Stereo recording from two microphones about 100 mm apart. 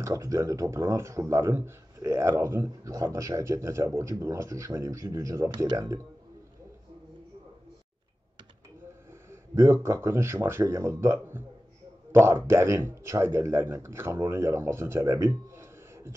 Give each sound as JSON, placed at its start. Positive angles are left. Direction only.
{"t": 0.0, "sound": "a man's voice", "side_deg": -30}
{"t": 9.3, "sound": "a man's voice", "side_deg": -25}